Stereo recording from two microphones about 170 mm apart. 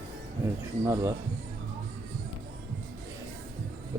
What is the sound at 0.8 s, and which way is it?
Speech, 15° right (ahead or behind).